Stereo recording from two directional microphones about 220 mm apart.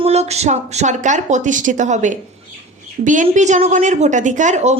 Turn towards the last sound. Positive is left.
turn(degrees=-30)  # may be behind; listen again after turning